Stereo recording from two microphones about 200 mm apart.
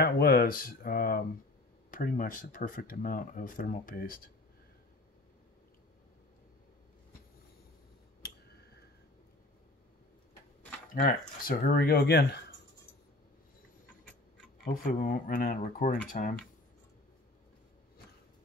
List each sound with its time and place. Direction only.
0.0 s speech: 50° left (ahead or behind)
10.9 s speech: 45° left (ahead or behind)
14.6 s speech: 45° left (ahead or behind)